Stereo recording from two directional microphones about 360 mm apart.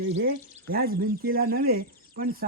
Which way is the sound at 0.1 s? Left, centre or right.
Right.